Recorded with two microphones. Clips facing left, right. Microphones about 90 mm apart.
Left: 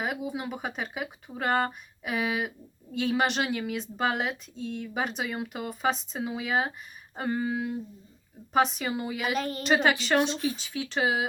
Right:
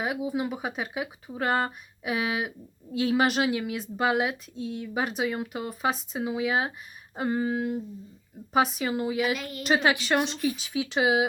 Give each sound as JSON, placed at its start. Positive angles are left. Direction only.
{"t": 0.0, "sound": "speech", "side_deg": -5}
{"t": 9.3, "sound": "a woman's voice", "side_deg": 40}
{"t": 9.6, "sound": "speech", "side_deg": -5}